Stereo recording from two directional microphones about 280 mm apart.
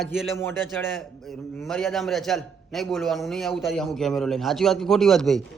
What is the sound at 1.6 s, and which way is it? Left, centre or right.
A man's voice, centre.